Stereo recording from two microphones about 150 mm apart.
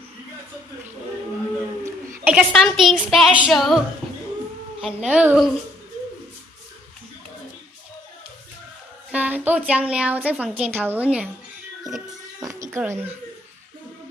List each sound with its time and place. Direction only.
2.2 s a woman's voice: centre (ahead or behind)
9.1 s a woman's voice: 10° right (ahead or behind)
12.1 s music: 25° right (ahead or behind)